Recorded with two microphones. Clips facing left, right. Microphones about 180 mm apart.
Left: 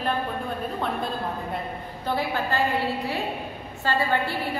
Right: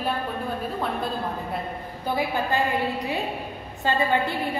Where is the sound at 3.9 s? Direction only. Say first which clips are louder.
Right 2 dB; 20° right (ahead or behind).